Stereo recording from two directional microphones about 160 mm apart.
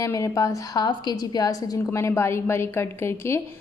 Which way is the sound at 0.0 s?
20° left (ahead or behind).